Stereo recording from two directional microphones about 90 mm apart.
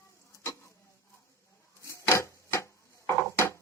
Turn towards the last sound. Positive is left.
turn(degrees=30)  # may be behind; listen again after turning